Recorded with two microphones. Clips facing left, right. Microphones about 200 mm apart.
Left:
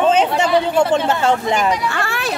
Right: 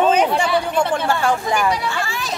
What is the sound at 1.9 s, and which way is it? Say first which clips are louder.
Vehicle: left 3 dB; 65° left (ahead or behind).